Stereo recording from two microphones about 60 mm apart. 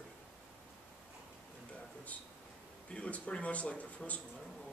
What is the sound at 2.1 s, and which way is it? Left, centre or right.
Speech, left.